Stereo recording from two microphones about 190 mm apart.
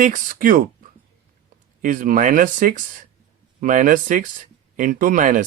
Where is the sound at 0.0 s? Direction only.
45° right (ahead or behind).